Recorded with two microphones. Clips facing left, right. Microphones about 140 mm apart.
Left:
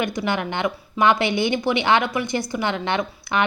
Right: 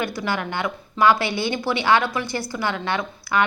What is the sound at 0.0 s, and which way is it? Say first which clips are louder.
A woman's voice: left 2 dB; 20° left (ahead or behind).